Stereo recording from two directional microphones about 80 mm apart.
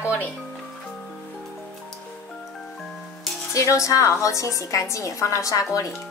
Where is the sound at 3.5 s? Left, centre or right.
Left.